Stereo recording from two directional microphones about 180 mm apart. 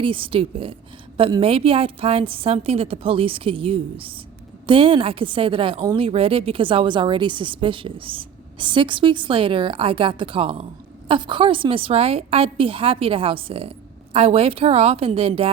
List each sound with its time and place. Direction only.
0.0 s a woman's voice: 30° right (ahead or behind)